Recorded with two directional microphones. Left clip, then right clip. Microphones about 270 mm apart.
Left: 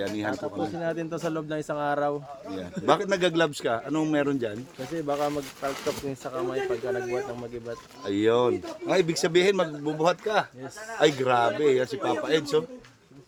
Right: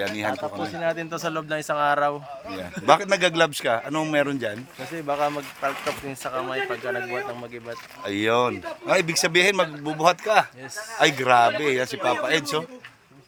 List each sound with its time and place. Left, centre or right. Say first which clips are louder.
0.0 s speech: right 3 dB; centre
0.7 s speech: right 4 dB; centre
2.8 s speech: right 5 dB; centre
5.0 s speech: right 4 dB; centre
8.0 s speech: right 1 dB; centre